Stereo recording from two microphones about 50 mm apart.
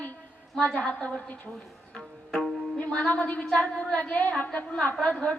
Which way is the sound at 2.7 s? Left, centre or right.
Left.